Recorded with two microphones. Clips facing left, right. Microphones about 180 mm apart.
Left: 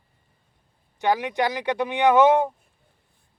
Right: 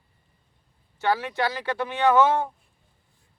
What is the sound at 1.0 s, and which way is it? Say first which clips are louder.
Speech: left 2 dB; 15° left (ahead or behind).